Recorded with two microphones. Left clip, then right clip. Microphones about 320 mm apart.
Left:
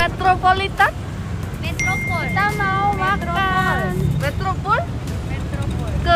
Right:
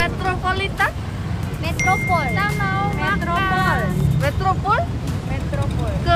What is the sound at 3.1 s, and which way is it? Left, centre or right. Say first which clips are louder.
Vehicle: left 1 dB; centre.